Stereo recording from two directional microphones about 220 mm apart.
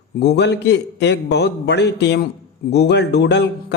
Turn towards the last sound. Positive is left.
turn(degrees=50)  # may be behind; listen again after turning